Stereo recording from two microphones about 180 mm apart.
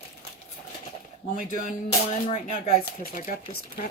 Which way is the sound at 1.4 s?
45° left (ahead or behind).